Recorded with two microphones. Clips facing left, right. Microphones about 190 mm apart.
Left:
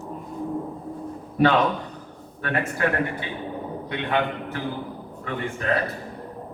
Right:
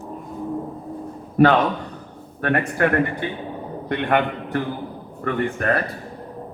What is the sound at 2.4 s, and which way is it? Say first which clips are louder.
Speech: right 5 dB; 60° right (ahead or behind).